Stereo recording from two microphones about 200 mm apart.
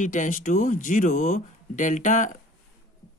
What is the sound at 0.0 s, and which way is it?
Speech, 40° left (ahead or behind).